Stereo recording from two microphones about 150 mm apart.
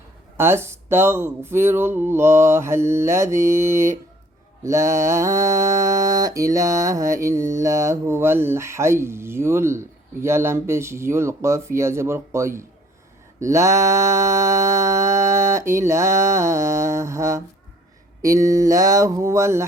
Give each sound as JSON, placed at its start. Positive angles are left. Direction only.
{"t": 0.3, "sound": "speech", "side_deg": -15}
{"t": 3.3, "sound": "mantra", "side_deg": -20}